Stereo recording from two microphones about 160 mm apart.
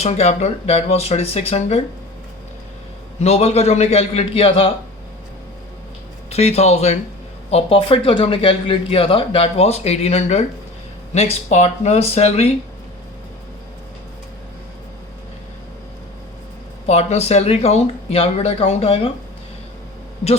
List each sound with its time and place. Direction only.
0.0 s speech: 40° left (ahead or behind)
3.2 s speech: 40° left (ahead or behind)
6.3 s speech: 40° left (ahead or behind)
16.8 s speech: 40° left (ahead or behind)